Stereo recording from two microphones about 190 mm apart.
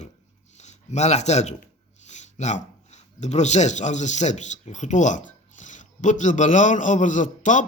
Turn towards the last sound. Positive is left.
turn(degrees=40)  # may be behind; listen again after turning